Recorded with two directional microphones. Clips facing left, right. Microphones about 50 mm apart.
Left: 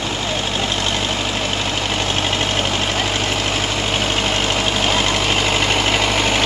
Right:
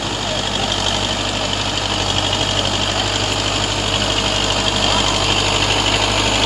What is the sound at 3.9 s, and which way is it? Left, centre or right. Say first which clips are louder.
Vehicle: even; left.